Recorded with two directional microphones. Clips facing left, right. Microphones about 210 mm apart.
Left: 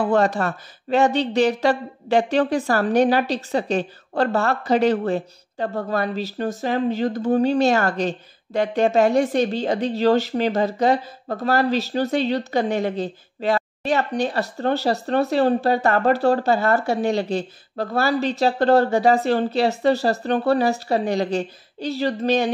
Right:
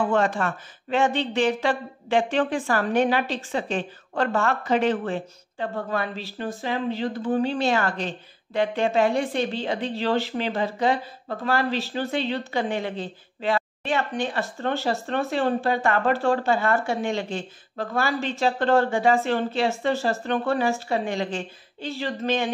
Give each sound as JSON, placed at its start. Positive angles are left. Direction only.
{"t": 0.0, "sound": "speech", "side_deg": 40}